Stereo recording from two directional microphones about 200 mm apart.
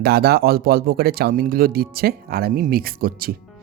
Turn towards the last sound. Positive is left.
turn(degrees=-50)  # may be behind; listen again after turning